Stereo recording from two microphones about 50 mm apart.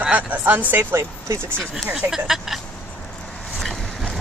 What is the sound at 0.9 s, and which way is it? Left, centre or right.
Speech, right.